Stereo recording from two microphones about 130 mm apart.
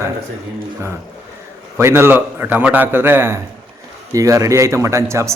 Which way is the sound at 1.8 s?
20° right (ahead or behind).